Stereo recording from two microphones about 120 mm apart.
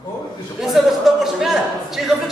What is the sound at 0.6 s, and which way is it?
A man's voice, centre (ahead or behind).